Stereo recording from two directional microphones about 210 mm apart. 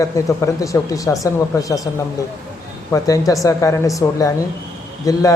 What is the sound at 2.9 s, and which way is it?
Speech, 15° left (ahead or behind).